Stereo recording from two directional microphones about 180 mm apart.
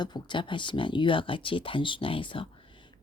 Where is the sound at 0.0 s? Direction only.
25° left (ahead or behind).